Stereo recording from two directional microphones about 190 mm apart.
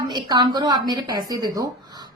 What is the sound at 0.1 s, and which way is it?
A woman's voice, 20° right (ahead or behind).